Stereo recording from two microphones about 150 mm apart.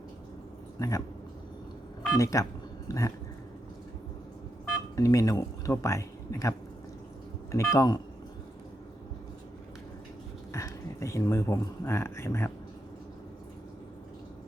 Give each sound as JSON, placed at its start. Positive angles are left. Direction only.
{"t": 0.8, "sound": "speech", "side_deg": 20}
{"t": 2.1, "sound": "speech", "side_deg": 20}
{"t": 4.9, "sound": "speech", "side_deg": 20}
{"t": 7.5, "sound": "speech", "side_deg": 20}
{"t": 10.5, "sound": "speech", "side_deg": 20}